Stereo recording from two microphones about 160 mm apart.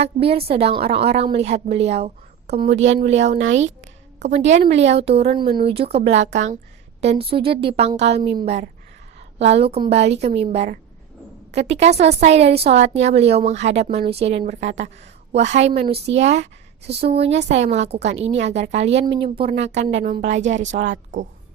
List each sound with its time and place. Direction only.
0.0 s a woman's voice: 40° right (ahead or behind)
6.3 s a woman's voice: 50° right (ahead or behind)